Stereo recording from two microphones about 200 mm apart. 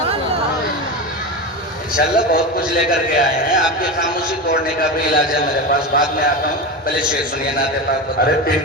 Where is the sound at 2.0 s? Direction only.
45° left (ahead or behind).